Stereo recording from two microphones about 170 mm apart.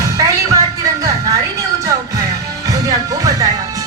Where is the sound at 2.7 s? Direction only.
20° right (ahead or behind).